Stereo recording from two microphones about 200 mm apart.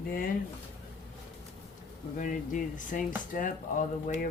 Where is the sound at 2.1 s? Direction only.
40° left (ahead or behind).